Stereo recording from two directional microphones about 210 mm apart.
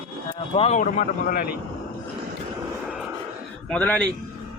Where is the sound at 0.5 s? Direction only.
30° left (ahead or behind).